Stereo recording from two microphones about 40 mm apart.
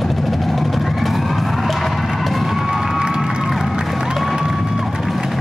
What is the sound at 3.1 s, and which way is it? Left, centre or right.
Music, centre.